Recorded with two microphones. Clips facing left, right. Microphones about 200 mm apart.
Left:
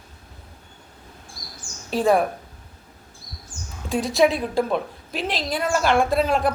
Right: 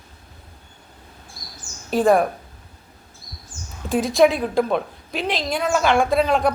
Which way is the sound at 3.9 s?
Centre (ahead or behind).